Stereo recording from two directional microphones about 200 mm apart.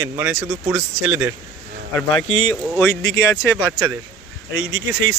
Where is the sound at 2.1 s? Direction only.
30° left (ahead or behind).